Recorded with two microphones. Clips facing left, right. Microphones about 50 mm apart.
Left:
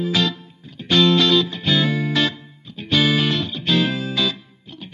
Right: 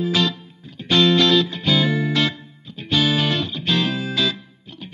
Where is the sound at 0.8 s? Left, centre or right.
Centre.